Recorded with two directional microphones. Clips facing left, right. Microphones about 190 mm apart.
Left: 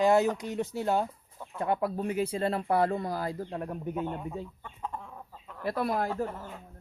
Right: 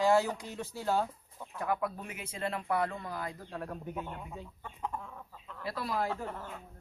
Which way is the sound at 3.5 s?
25° left (ahead or behind).